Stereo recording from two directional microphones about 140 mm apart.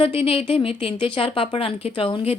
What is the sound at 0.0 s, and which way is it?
Speech, 40° left (ahead or behind).